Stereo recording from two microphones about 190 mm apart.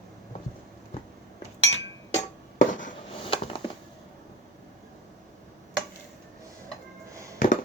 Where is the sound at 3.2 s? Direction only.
30° left (ahead or behind).